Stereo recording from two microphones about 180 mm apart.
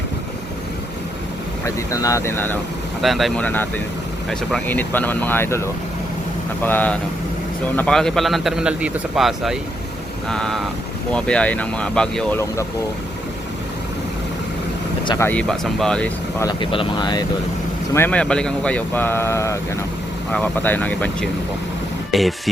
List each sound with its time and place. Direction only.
1.6 s speech: 20° left (ahead or behind)
3.0 s a man's voice: centre (ahead or behind)
15.2 s speech: 10° left (ahead or behind)
16.4 s speech: 25° left (ahead or behind)
17.9 s speech: 10° left (ahead or behind)